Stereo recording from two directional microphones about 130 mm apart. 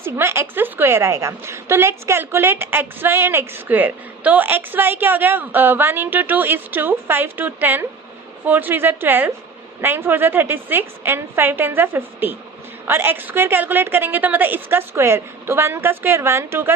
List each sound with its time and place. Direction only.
0.0 s a woman's voice: 20° right (ahead or behind)